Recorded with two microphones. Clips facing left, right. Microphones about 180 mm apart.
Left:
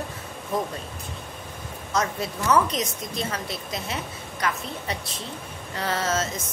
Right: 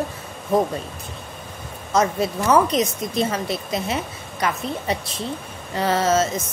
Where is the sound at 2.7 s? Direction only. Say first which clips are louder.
Right 7 dB; 55° right (ahead or behind).